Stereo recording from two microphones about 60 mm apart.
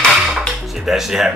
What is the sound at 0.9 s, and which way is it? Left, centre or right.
Speech, centre.